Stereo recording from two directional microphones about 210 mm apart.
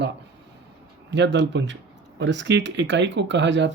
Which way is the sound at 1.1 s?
55° right (ahead or behind).